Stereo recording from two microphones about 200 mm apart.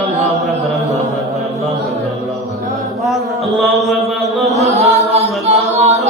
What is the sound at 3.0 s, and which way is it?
Music, centre (ahead or behind).